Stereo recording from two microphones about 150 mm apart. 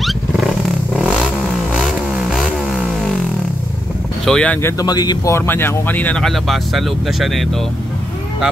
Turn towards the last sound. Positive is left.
turn(degrees=0)  # may be behind; listen again after turning